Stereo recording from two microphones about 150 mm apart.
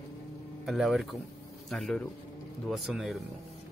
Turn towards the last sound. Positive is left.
turn(degrees=0)  # may be behind; listen again after turning